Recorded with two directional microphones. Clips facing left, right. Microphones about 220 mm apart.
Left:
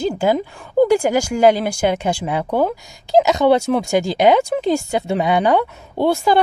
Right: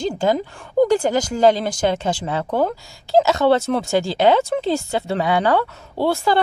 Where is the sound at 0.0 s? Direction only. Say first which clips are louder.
Left 2 dB; 10° left (ahead or behind).